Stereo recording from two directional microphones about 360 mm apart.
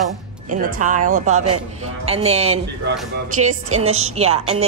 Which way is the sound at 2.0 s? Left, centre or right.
Centre.